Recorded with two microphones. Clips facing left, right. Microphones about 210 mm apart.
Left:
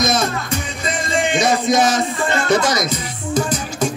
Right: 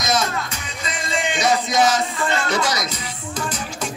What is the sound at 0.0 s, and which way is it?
Music, 55° left (ahead or behind).